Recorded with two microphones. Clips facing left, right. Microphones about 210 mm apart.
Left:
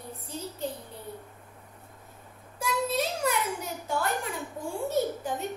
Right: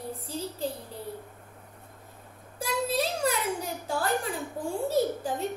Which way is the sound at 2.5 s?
30° right (ahead or behind).